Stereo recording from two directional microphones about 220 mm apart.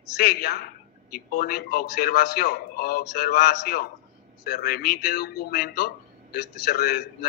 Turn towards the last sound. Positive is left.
turn(degrees=45)  # may be behind; listen again after turning